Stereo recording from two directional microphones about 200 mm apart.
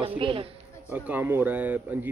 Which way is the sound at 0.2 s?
25° right (ahead or behind).